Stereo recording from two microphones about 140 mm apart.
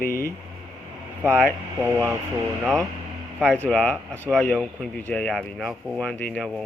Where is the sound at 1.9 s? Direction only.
20° right (ahead or behind).